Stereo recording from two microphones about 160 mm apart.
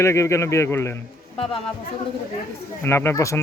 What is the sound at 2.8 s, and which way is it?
Speech, 15° left (ahead or behind).